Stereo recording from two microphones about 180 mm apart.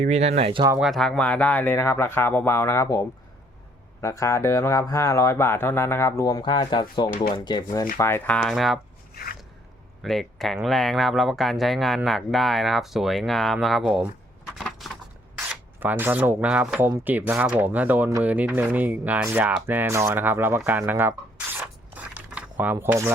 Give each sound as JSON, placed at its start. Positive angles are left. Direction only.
{"t": 0.0, "sound": "speech", "side_deg": -35}
{"t": 0.8, "sound": "speech", "side_deg": 0}
{"t": 4.0, "sound": "speech", "side_deg": 15}
{"t": 8.4, "sound": "speech", "side_deg": 0}
{"t": 9.1, "sound": "a sound", "side_deg": 55}
{"t": 10.0, "sound": "speech", "side_deg": 0}
{"t": 14.6, "sound": "a sound", "side_deg": 0}
{"t": 15.4, "sound": "speech", "side_deg": -10}